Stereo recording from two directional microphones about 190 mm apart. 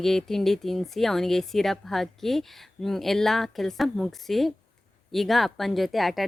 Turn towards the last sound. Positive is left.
turn(degrees=0)  # may be behind; listen again after turning